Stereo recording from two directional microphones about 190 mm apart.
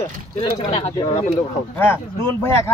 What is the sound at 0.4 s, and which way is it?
Speech, 30° left (ahead or behind).